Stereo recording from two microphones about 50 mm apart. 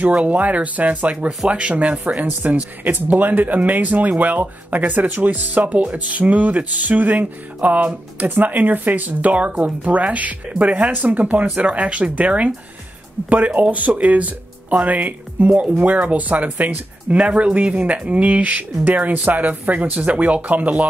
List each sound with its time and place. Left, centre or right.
0.0 s speech: right
17.2 s speech: right